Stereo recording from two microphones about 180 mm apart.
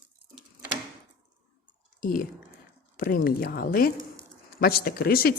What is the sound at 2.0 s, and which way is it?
Speech, 50° left (ahead or behind).